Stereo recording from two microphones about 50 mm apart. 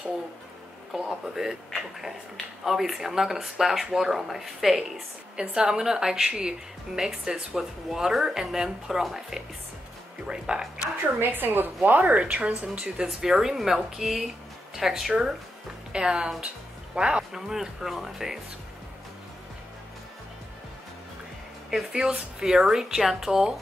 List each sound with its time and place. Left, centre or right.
0.9 s speech: centre
5.3 s speech: centre
11.1 s a woman's voice: right
12.7 s speech: centre
16.4 s music: right
17.3 s speech: centre
21.9 s speech: centre